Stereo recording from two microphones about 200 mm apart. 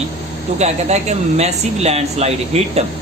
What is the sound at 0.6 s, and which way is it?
Speech, 35° right (ahead or behind).